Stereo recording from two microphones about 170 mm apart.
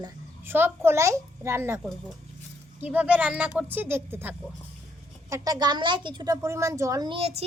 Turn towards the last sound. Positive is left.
turn(degrees=-35)  # may be behind; listen again after turning